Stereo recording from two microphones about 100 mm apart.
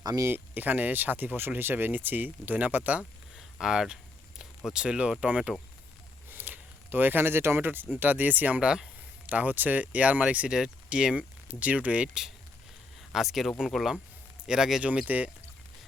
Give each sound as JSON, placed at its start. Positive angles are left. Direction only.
{"t": 0.0, "sound": "speech", "side_deg": -40}
{"t": 0.3, "sound": "speech", "side_deg": -20}
{"t": 3.3, "sound": "a sound", "side_deg": -5}
{"t": 4.4, "sound": "speech", "side_deg": -10}